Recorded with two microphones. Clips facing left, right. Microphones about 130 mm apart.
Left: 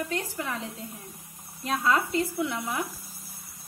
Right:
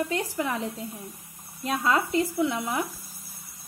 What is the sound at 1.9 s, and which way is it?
Speech, 35° right (ahead or behind).